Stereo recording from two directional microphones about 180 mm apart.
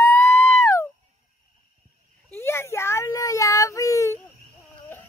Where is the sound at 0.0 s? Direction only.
10° left (ahead or behind).